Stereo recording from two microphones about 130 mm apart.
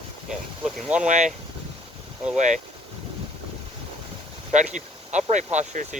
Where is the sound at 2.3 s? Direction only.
70° right (ahead or behind).